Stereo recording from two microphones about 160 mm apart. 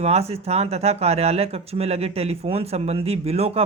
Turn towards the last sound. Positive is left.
turn(degrees=-40)  # may be behind; listen again after turning